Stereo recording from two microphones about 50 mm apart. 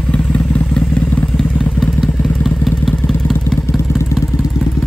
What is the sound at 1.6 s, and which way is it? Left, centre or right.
Motorcycle, centre.